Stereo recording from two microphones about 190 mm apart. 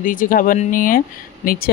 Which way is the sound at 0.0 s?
45° left (ahead or behind).